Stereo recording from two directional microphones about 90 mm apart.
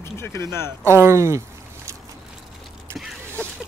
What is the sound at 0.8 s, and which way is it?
Speech, 30° right (ahead or behind).